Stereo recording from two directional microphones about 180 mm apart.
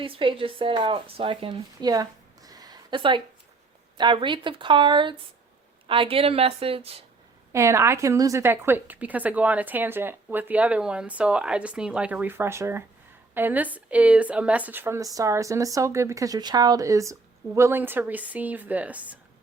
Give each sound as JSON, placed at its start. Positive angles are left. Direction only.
{"t": 0.0, "sound": "a woman's voice", "side_deg": -30}
{"t": 7.5, "sound": "a woman's voice", "side_deg": -15}